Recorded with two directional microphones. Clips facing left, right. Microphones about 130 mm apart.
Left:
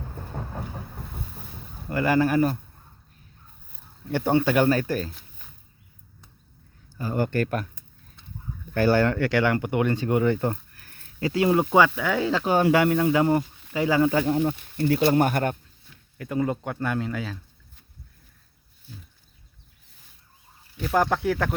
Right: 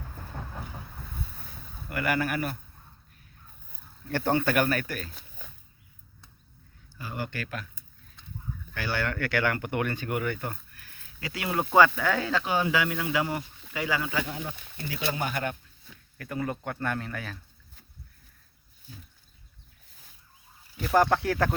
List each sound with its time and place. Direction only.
1.9 s speech: 30° left (ahead or behind)
4.1 s speech: 15° left (ahead or behind); by 5.1 s 30° left (ahead or behind)
6.9 s speech: 45° left (ahead or behind)
8.7 s speech: 45° left (ahead or behind)
9.1 s speech: 25° left (ahead or behind); by 11.3 s 40° left (ahead or behind)
11.3 s speech: 30° left (ahead or behind)
11.6 s speech: 10° left (ahead or behind)
12.3 s speech: 30° left (ahead or behind)
12.6 s speech: 55° left (ahead or behind)
12.9 s speech: 35° left (ahead or behind)
14.8 s speech: 50° left (ahead or behind)
16.1 s speech: 20° left (ahead or behind)
20.9 s speech: centre (ahead or behind)